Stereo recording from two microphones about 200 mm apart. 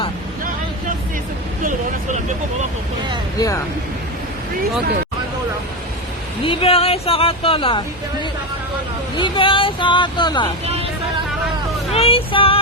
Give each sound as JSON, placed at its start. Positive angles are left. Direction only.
{"t": 3.3, "sound": "speech", "side_deg": 15}
{"t": 6.4, "sound": "speech", "side_deg": 25}
{"t": 11.9, "sound": "speech", "side_deg": 30}